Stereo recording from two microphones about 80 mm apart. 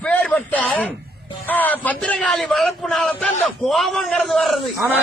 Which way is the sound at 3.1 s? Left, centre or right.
Centre.